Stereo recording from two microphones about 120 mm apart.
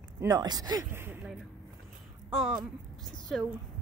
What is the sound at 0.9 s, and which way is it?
Speech, 20° right (ahead or behind).